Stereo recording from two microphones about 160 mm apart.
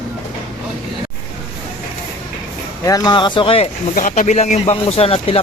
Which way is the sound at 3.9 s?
55° left (ahead or behind).